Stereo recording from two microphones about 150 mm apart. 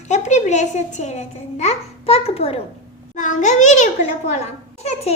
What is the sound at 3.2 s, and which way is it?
A child's voice, 55° left (ahead or behind).